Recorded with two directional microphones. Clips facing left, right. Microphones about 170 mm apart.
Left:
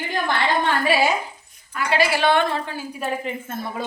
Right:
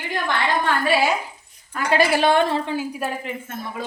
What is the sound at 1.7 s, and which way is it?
Speech, 45° right (ahead or behind).